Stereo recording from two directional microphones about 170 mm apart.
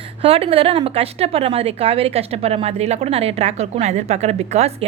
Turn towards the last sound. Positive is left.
turn(degrees=-40)  # may be behind; listen again after turning